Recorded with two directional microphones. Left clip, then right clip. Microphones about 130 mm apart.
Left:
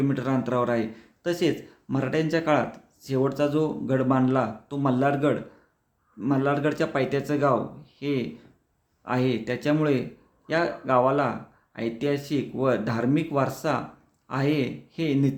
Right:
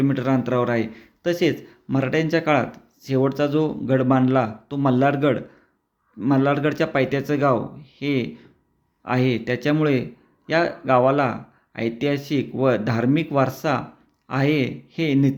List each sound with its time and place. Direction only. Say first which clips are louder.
0.0 s speech: right 4 dB; 20° right (ahead or behind)